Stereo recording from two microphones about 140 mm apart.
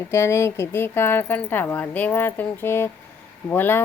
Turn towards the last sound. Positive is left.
turn(degrees=15)  # may be behind; listen again after turning